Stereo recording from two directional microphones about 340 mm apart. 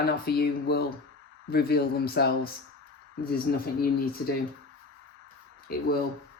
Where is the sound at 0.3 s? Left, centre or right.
Left.